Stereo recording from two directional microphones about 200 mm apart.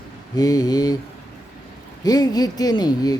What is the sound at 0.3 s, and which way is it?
Speech, 20° left (ahead or behind).